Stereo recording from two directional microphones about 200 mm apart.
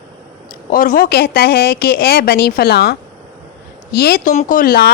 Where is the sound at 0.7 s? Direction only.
45° left (ahead or behind).